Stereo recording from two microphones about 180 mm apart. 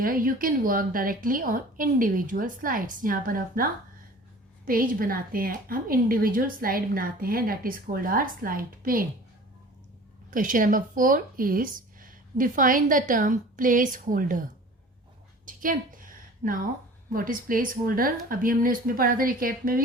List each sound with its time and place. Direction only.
0.0 s a woman's voice: 50° right (ahead or behind)
10.3 s a woman's voice: 50° right (ahead or behind)
15.4 s a woman's voice: 50° right (ahead or behind)